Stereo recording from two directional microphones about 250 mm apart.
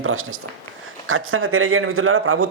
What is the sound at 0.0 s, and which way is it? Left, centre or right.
A man's voice, right.